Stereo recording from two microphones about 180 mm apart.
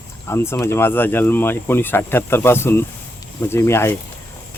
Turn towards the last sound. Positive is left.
turn(degrees=15)  # may be behind; listen again after turning